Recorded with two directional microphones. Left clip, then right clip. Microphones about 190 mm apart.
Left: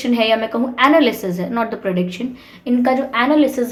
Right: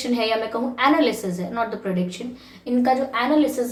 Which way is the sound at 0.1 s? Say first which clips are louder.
Left 6 dB; 40° left (ahead or behind).